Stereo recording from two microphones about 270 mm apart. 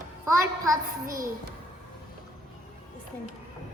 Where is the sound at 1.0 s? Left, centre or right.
Right.